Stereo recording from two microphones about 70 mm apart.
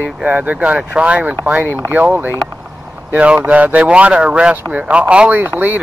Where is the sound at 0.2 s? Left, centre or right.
Right.